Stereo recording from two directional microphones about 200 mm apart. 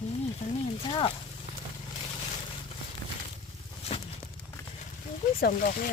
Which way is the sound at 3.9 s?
30° left (ahead or behind).